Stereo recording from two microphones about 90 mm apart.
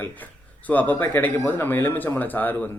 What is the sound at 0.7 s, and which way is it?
A man's voice, 20° left (ahead or behind).